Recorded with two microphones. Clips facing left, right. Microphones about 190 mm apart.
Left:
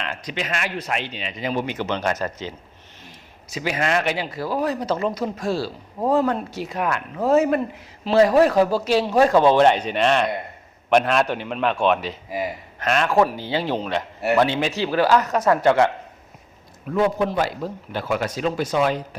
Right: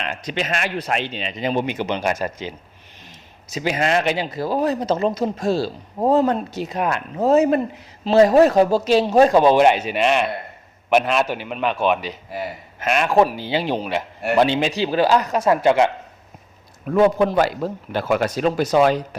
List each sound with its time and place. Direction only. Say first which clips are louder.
0.0 s speech: right 3 dB; 20° right (ahead or behind)
3.5 s a man's voice: right 3 dB; 25° right (ahead or behind)
16.9 s a man's voice: right 5 dB; 60° right (ahead or behind)
18.7 s speech: right 6 dB; 40° right (ahead or behind)